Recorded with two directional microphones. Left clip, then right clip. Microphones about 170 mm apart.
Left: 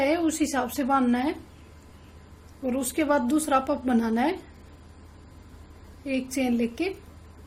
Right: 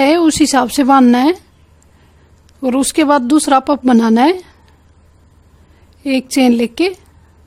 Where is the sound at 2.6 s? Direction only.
60° right (ahead or behind).